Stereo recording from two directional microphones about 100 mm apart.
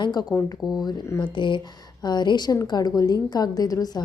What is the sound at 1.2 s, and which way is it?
A woman's voice, 55° left (ahead or behind).